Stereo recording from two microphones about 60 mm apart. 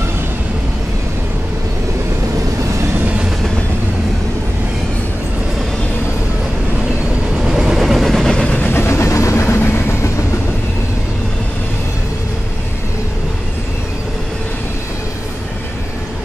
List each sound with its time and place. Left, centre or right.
7.3 s train: centre
8.5 s vehicle: left
8.8 s vehicle: left
9.6 s train: left